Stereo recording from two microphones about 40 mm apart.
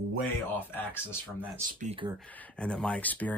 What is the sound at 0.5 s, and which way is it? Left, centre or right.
Speech, left.